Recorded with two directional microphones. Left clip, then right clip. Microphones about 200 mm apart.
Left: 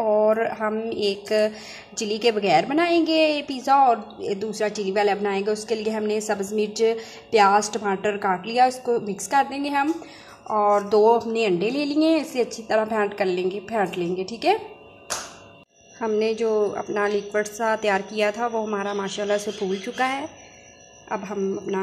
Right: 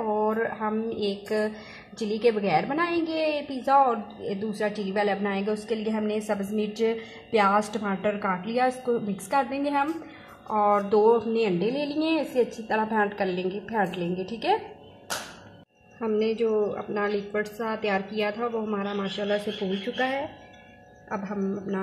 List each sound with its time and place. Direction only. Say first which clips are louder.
0.1 s a woman's voice: left 6 dB; 25° left (ahead or behind)
16.0 s a woman's voice: left 3 dB; 20° left (ahead or behind)
21.1 s a woman's voice: left 5 dB; 25° left (ahead or behind)